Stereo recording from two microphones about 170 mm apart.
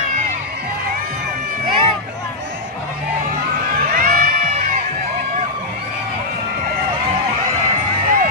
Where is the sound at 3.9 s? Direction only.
55° right (ahead or behind).